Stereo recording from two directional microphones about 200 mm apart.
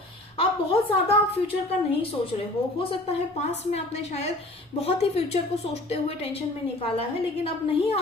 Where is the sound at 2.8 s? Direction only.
30° left (ahead or behind).